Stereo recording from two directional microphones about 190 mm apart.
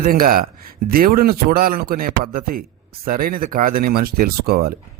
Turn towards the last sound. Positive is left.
turn(degrees=-55)  # may be behind; listen again after turning